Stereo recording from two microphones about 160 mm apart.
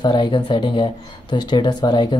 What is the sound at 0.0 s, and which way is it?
Speech, 30° left (ahead or behind).